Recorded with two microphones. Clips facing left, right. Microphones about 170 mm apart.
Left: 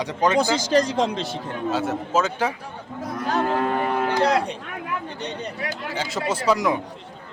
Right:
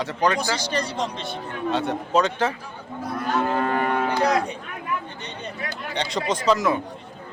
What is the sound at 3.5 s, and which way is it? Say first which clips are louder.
Moo: even; centre (ahead or behind).